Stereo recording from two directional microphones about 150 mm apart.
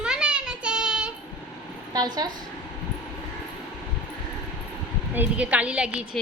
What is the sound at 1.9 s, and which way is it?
Speech, 25° right (ahead or behind).